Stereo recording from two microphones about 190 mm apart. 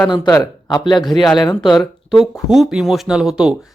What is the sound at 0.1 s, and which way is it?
Speech, 20° left (ahead or behind).